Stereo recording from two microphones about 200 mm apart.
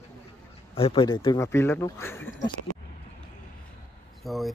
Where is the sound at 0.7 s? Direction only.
25° left (ahead or behind).